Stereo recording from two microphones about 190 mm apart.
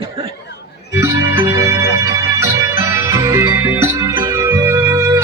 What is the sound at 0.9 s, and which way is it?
Music, 15° right (ahead or behind).